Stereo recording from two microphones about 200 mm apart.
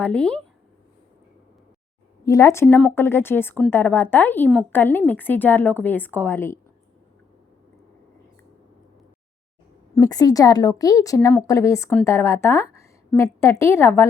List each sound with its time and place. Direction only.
0.0 s speech: 5° left (ahead or behind)
2.2 s a woman's voice: 15° left (ahead or behind)
9.9 s a woman's voice: 20° left (ahead or behind)